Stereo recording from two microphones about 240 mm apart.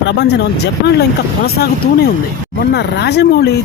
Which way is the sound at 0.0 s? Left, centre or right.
Left.